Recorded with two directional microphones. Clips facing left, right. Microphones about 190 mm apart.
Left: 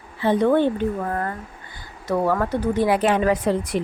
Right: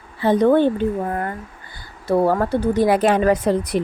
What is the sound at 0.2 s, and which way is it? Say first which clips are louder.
Speech: right 3 dB; 40° right (ahead or behind).